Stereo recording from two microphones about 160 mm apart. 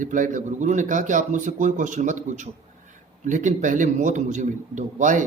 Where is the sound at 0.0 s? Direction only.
55° right (ahead or behind).